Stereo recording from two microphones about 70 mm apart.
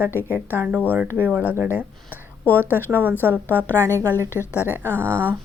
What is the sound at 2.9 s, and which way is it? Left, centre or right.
Speech, right.